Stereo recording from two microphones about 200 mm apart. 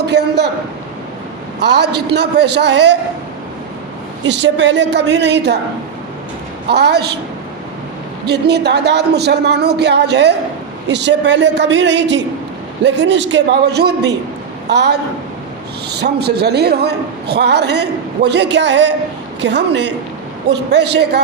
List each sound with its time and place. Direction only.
0.0 s a man's voice: 55° right (ahead or behind)
1.6 s a man's voice: 55° right (ahead or behind)
4.3 s a man's voice: 60° right (ahead or behind)
6.7 s a man's voice: 55° right (ahead or behind)
8.3 s a man's voice: 55° right (ahead or behind)